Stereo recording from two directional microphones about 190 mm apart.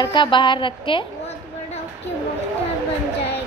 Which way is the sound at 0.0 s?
25° left (ahead or behind).